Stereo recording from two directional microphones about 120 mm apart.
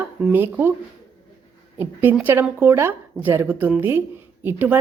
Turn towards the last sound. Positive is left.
turn(degrees=-15)  # may be behind; listen again after turning